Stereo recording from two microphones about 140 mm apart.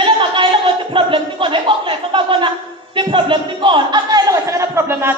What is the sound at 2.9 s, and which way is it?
A man's voice, 35° right (ahead or behind).